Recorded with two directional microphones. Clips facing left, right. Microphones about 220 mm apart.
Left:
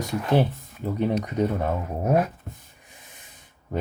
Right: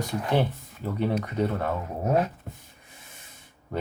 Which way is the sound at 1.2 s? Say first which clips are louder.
Left 2 dB; 15° left (ahead or behind).